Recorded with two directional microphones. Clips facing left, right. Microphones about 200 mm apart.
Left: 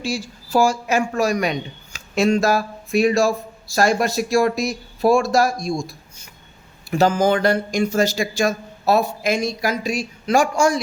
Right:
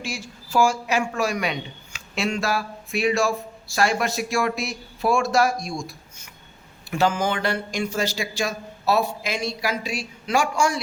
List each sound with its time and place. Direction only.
0.0 s a woman's voice: 35° left (ahead or behind)